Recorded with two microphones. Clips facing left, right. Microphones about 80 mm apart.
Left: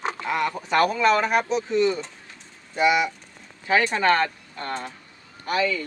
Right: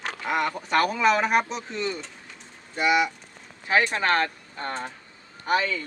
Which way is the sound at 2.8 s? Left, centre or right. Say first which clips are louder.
Left 2 dB; centre.